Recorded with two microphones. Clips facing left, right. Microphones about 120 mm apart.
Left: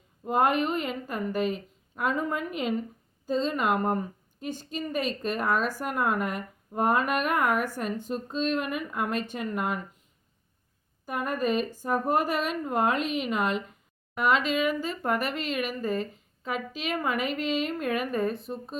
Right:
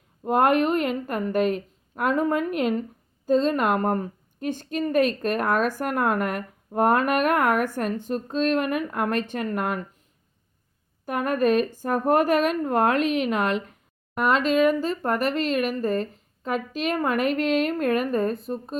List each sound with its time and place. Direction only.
0.3 s a woman's voice: 55° right (ahead or behind)
11.0 s a woman's voice: 60° right (ahead or behind)